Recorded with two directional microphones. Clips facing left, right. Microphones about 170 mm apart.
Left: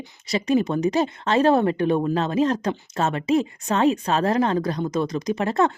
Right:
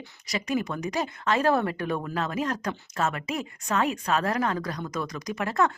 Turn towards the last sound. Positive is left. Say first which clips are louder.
# left 5 dB
turn(degrees=25)  # may be behind; listen again after turning